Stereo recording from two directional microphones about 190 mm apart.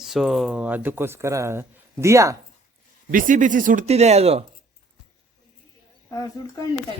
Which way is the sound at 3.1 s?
45° right (ahead or behind).